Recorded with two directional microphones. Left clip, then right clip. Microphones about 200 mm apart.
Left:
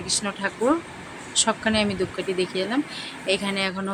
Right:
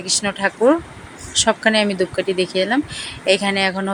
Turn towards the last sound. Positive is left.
turn(degrees=-20)  # may be behind; listen again after turning